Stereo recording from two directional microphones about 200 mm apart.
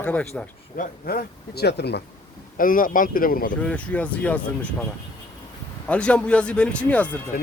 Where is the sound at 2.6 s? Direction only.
45° left (ahead or behind).